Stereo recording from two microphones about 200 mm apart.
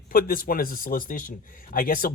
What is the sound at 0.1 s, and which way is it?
A man's voice, 45° left (ahead or behind).